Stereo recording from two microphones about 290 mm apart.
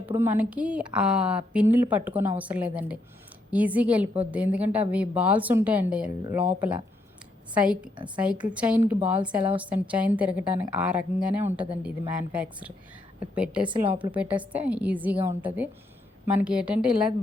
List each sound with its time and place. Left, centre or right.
0.1 s a woman's voice: centre
13.7 s a woman's voice: centre
14.1 s a woman's voice: centre